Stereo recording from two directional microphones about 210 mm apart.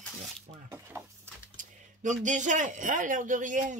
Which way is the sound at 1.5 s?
35° right (ahead or behind).